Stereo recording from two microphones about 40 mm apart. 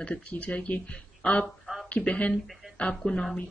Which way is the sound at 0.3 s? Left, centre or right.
Left.